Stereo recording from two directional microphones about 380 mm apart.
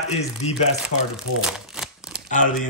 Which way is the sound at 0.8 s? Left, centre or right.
Centre.